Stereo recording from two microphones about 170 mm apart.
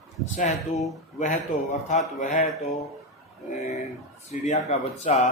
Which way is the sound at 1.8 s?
45° left (ahead or behind).